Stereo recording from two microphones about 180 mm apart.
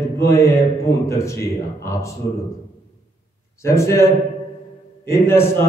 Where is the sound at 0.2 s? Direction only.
15° left (ahead or behind).